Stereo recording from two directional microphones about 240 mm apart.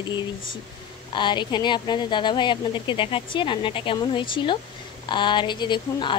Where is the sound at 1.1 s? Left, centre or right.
Centre.